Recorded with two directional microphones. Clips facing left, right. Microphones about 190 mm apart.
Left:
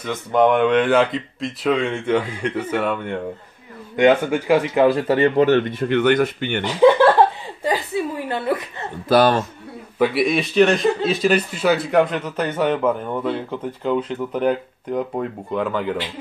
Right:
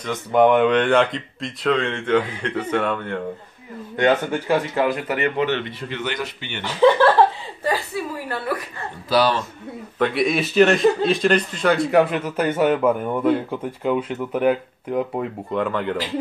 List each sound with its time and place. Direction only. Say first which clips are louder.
0.0 s a man's voice: right 1 dB; centre (ahead or behind)
4.8 s speech: left 6 dB; 30° left (ahead or behind)
5.4 s speech: left 7 dB; 45° left (ahead or behind)
6.6 s speech: left 2 dB; 15° left (ahead or behind)
7.6 s chuckle: left 2 dB; 20° left (ahead or behind)
9.1 s speech: left 4 dB; 50° left (ahead or behind)
9.9 s a man's voice: left 2 dB; 5° left (ahead or behind)